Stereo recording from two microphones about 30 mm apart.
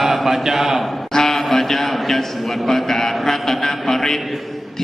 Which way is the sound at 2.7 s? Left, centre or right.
Centre.